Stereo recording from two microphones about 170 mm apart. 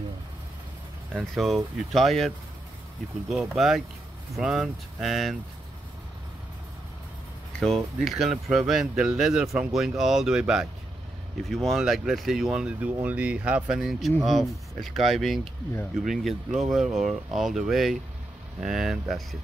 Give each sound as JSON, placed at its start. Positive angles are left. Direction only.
{"t": 1.1, "sound": "speech", "side_deg": 0}
{"t": 7.6, "sound": "speech", "side_deg": 0}